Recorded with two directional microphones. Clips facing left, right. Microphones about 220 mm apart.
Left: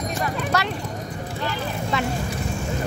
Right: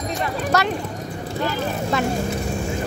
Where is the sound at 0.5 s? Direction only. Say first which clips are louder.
Right 5 dB; 45° right (ahead or behind).